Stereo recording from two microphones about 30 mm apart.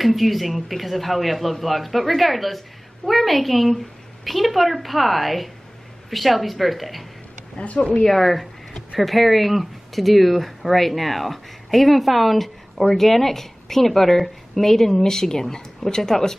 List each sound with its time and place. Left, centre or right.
0.0 s speech: centre
7.5 s speech: left
8.1 s a woman's voice: centre